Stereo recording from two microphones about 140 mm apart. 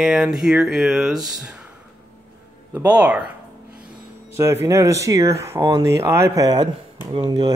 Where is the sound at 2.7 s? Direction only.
10° right (ahead or behind).